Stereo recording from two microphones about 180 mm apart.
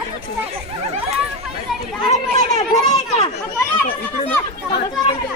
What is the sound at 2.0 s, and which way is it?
Speech, 40° left (ahead or behind).